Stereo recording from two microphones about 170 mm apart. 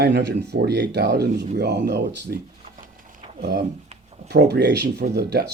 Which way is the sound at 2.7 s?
50° right (ahead or behind).